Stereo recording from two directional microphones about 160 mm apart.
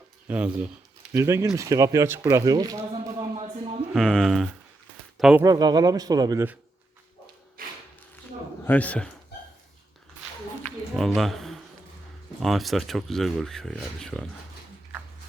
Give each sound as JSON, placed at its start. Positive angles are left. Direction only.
{"t": 0.3, "sound": "speech", "side_deg": -10}
{"t": 3.9, "sound": "speech", "side_deg": 5}
{"t": 5.4, "sound": "speech", "side_deg": -25}
{"t": 7.6, "sound": "a sound", "side_deg": -65}
{"t": 8.6, "sound": "a man's voice", "side_deg": 10}
{"t": 10.6, "sound": "a sound", "side_deg": 0}
{"t": 12.4, "sound": "speech", "side_deg": 0}